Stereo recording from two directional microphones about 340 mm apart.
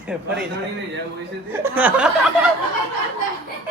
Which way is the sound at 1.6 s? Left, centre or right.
Centre.